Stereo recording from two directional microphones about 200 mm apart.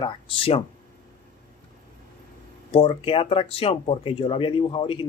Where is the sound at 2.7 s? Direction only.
30° left (ahead or behind).